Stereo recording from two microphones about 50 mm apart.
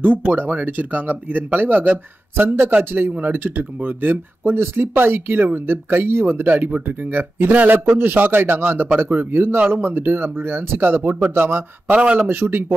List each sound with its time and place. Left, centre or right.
0.4 s speech: right
2.3 s speech: right
11.9 s speech: right
12.3 s speech: right